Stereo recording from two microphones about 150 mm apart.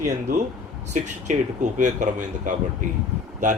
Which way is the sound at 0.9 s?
55° right (ahead or behind).